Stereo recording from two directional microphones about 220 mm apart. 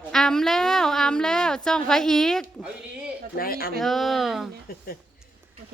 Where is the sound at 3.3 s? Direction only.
40° left (ahead or behind).